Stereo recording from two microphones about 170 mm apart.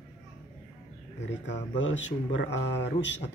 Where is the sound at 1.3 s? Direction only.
90° left.